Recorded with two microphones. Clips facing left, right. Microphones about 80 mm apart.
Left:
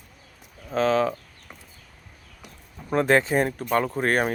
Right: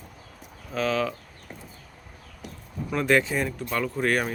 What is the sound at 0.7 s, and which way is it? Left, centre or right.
Speech, left.